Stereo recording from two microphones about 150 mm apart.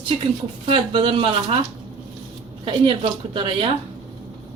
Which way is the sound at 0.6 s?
35° right (ahead or behind).